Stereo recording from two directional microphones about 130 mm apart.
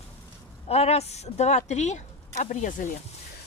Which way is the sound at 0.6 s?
50° left (ahead or behind).